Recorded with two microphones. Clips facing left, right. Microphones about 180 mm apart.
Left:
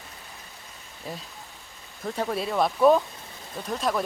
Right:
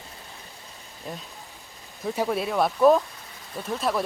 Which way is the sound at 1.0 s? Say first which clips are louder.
Even; 5° left (ahead or behind).